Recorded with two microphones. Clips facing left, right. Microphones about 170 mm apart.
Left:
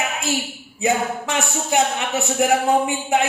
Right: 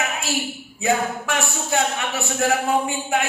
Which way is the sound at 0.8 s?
20° left (ahead or behind).